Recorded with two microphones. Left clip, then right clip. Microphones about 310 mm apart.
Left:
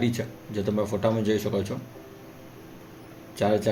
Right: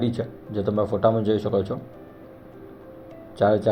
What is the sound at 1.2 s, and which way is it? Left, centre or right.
Speech, centre.